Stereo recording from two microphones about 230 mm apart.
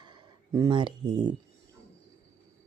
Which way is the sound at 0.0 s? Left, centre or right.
Centre.